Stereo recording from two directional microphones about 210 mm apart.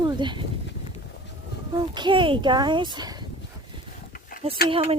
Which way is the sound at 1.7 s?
20° right (ahead or behind).